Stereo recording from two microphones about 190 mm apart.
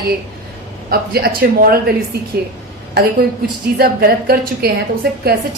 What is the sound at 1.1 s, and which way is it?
Speech, 55° right (ahead or behind).